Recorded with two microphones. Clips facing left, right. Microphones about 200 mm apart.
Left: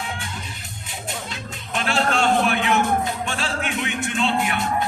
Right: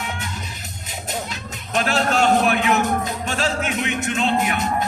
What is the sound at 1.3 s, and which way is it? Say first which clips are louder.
Music: right 3 dB; 40° right (ahead or behind).